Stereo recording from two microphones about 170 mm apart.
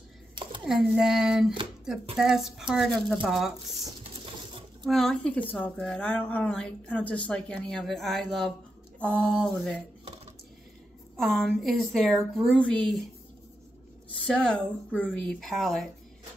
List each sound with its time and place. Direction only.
0.7 s speech: 5° right (ahead or behind)
4.8 s speech: centre (ahead or behind)
11.1 s speech: centre (ahead or behind)
14.2 s speech: 5° left (ahead or behind)